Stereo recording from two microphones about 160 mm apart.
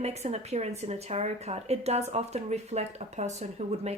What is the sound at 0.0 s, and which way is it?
Speech, 45° right (ahead or behind).